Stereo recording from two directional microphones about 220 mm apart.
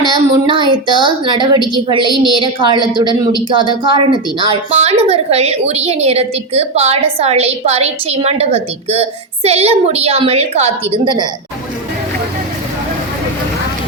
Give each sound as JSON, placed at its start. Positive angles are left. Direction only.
{"t": 0.0, "sound": "a woman's voice", "side_deg": -20}